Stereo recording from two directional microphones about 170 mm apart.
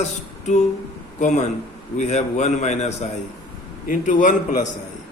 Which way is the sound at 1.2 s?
45° left (ahead or behind).